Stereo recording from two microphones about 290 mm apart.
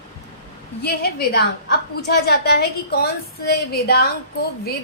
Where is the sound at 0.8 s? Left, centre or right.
Left.